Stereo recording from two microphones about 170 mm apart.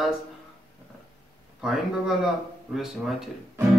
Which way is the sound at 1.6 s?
5° right (ahead or behind).